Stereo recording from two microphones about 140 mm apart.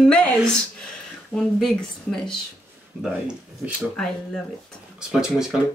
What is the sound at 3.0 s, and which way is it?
Speech, 10° right (ahead or behind).